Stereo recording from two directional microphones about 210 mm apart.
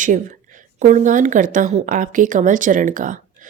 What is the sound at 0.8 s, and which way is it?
Speech, 35° right (ahead or behind).